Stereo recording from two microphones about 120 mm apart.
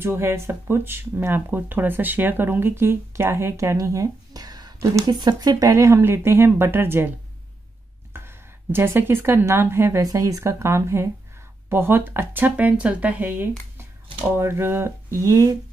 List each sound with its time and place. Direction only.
0.0 s speech: 20° right (ahead or behind)